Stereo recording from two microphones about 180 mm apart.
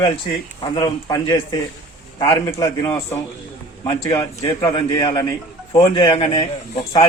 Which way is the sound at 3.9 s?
25° left (ahead or behind).